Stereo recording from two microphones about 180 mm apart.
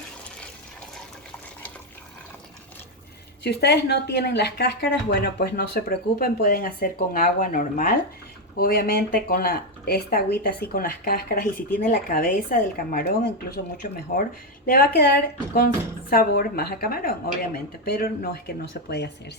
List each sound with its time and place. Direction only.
3.4 s speech: 65° left (ahead or behind)